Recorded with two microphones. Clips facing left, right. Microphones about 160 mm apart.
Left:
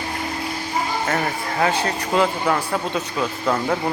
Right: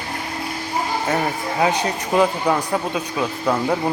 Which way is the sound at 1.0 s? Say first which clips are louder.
Right 2 dB; 15° right (ahead or behind).